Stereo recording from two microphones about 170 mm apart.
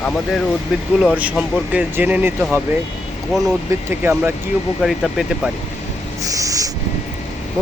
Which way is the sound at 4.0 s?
10° right (ahead or behind).